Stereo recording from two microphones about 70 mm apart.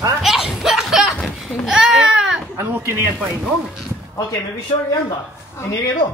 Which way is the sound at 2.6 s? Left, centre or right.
Right.